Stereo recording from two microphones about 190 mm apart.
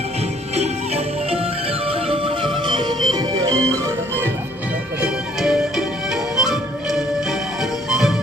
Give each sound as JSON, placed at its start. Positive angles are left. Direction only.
{"t": 0.5, "sound": "music", "side_deg": -35}